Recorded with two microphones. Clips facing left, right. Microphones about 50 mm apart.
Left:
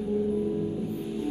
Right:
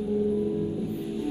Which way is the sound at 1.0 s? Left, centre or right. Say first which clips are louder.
Right 1 dB; left.